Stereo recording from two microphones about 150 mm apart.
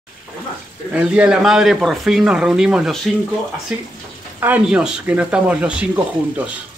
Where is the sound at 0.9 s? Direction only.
10° right (ahead or behind).